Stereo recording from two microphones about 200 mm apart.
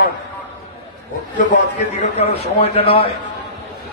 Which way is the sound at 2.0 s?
30° left (ahead or behind).